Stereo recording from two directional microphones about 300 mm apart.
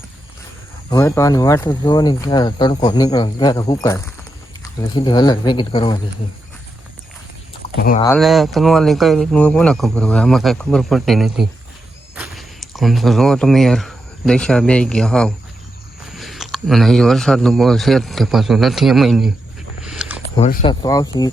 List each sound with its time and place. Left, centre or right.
0.9 s speech: centre
8.0 s speech: centre
19.8 s a sound: centre
20.3 s speech: left
20.8 s speech: centre